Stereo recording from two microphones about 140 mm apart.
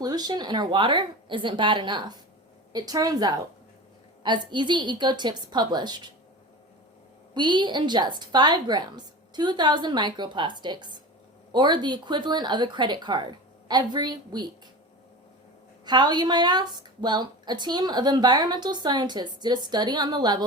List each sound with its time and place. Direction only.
0.0 s a woman's voice: 30° right (ahead or behind)
7.3 s a woman's voice: 30° right (ahead or behind)
15.9 s a woman's voice: 30° right (ahead or behind)